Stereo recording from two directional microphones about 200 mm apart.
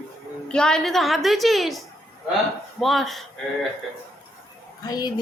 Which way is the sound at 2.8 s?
Centre (ahead or behind).